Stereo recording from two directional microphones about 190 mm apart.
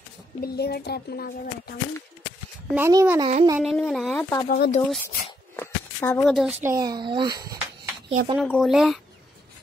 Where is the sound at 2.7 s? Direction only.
15° right (ahead or behind).